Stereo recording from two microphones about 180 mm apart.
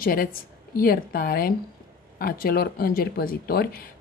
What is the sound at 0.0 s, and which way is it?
Speech, 55° left (ahead or behind).